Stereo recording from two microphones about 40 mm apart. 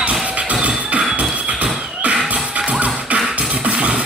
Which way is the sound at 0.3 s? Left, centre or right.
Right.